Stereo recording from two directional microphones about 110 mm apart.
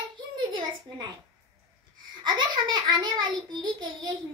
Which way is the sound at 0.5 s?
40° right (ahead or behind).